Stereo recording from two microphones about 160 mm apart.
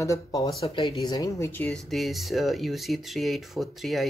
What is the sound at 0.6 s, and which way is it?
Speech, 35° left (ahead or behind).